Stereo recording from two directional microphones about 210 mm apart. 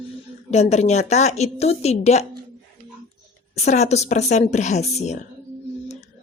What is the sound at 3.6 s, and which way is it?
A woman's voice, 35° left (ahead or behind).